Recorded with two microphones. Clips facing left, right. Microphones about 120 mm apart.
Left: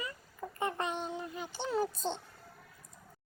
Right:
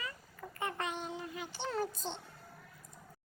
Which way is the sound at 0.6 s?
25° left (ahead or behind).